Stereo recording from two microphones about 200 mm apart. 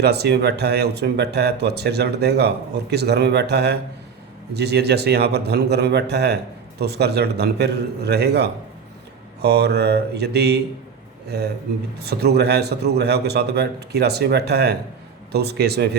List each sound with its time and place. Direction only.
0.0 s speech: 55° right (ahead or behind)
11.9 s speech: 55° right (ahead or behind)